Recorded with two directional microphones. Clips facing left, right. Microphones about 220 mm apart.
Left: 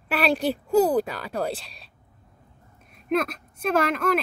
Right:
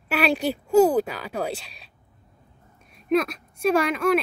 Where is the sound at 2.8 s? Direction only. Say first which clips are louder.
Right 3 dB; centre (ahead or behind).